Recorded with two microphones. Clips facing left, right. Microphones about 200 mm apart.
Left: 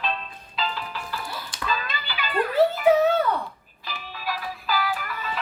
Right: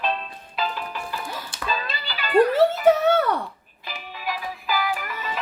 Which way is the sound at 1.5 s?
30° right (ahead or behind).